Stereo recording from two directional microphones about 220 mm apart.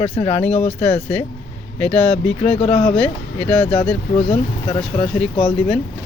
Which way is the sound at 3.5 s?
5° left (ahead or behind).